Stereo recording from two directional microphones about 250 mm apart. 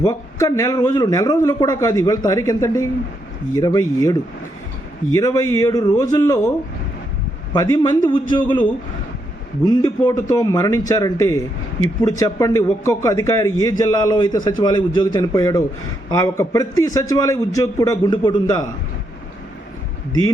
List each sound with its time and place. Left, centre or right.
0.0 s a man's voice: centre
7.5 s a man's voice: centre
9.6 s a man's voice: centre